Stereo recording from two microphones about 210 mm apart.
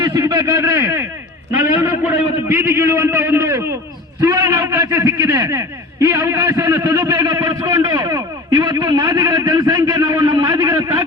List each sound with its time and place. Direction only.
0.0 s a man's voice: 20° right (ahead or behind)